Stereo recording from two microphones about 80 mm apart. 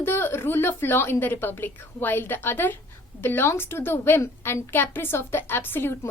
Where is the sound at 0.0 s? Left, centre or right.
Left.